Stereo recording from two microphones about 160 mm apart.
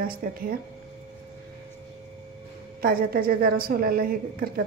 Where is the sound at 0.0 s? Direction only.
65° right (ahead or behind).